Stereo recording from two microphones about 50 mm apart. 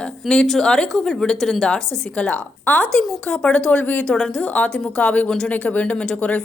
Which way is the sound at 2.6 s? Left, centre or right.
Left.